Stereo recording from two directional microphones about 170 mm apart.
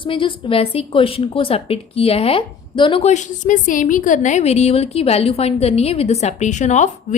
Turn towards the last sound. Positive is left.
turn(degrees=45)  # may be behind; listen again after turning